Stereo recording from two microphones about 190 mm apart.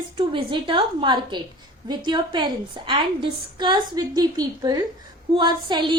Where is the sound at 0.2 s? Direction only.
30° right (ahead or behind).